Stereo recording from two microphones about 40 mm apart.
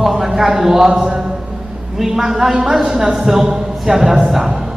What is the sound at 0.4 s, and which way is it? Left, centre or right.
A man's voice, centre.